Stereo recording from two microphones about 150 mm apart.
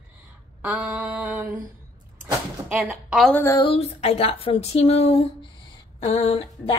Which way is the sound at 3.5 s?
40° left (ahead or behind).